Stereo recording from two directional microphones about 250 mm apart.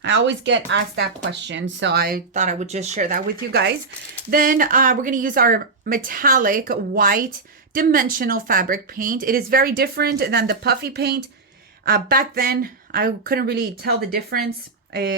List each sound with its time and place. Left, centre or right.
0.0 s speech: right